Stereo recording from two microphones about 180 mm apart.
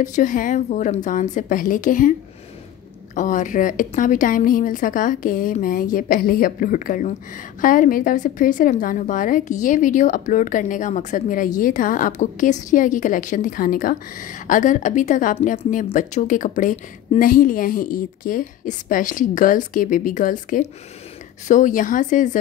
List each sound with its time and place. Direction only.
0.0 s a woman's voice: 45° left (ahead or behind)
3.2 s a woman's voice: 45° left (ahead or behind)